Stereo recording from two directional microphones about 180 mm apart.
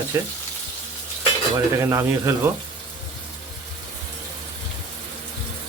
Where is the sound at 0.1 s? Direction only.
15° right (ahead or behind).